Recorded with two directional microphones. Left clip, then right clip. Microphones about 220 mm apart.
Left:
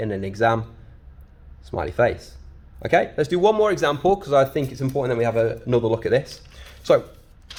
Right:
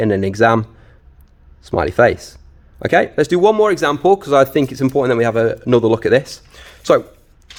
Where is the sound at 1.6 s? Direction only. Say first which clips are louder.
Right 8 dB; 50° right (ahead or behind).